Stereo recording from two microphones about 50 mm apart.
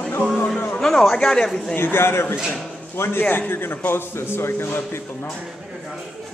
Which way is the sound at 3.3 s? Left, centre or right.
Left.